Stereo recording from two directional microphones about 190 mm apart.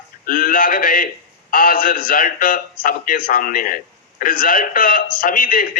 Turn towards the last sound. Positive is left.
turn(degrees=45)  # may be behind; listen again after turning